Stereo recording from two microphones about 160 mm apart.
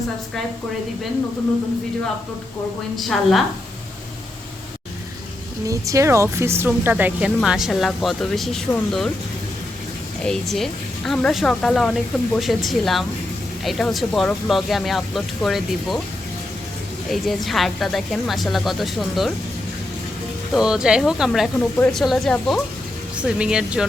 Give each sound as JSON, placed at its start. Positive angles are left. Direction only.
{"t": 2.9, "sound": "speech", "side_deg": 0}
{"t": 5.6, "sound": "speech", "side_deg": -20}
{"t": 10.2, "sound": "speech", "side_deg": 0}
{"t": 17.1, "sound": "speech", "side_deg": 0}
{"t": 20.5, "sound": "speech", "side_deg": -5}